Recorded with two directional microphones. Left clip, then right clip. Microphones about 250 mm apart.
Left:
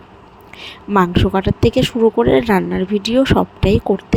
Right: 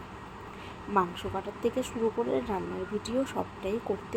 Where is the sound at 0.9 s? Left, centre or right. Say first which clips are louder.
Left 14 dB; left.